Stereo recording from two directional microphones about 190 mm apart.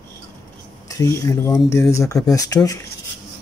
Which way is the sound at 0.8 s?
20° left (ahead or behind).